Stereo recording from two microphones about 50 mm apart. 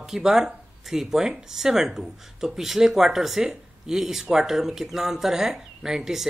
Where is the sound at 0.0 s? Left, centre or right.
Centre.